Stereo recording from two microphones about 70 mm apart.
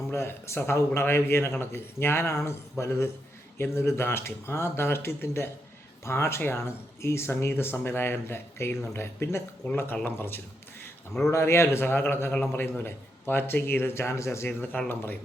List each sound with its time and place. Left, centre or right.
0.1 s a man's voice: left
9.7 s a man's voice: left
14.4 s speech: left